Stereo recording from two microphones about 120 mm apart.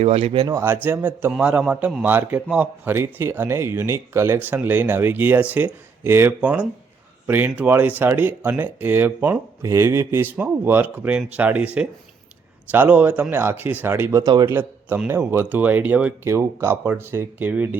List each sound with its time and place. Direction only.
0.0 s speech: 55° right (ahead or behind)
0.3 s speech: 30° right (ahead or behind)
0.9 s speech: 20° right (ahead or behind)
14.5 s a man's voice: 15° right (ahead or behind)
16.3 s speech: 20° right (ahead or behind)